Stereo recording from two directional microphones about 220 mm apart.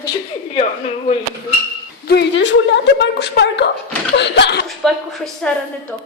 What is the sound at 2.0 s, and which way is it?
A woman's voice, 50° left (ahead or behind).